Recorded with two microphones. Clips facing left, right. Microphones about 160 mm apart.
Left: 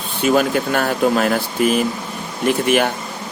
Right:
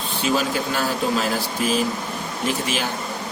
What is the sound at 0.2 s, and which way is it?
Speech, 55° left (ahead or behind).